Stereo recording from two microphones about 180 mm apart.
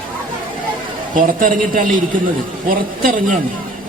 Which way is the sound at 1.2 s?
50° right (ahead or behind).